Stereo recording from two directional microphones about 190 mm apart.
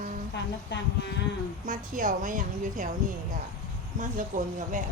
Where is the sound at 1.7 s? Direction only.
45° right (ahead or behind).